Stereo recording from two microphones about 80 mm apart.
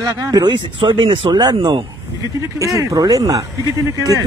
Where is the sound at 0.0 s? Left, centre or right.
Right.